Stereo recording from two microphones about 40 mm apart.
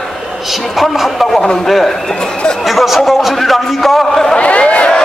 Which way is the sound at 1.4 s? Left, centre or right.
Centre.